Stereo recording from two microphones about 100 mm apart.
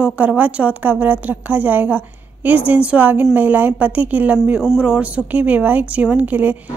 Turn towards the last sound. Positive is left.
turn(degrees=-15)  # may be behind; listen again after turning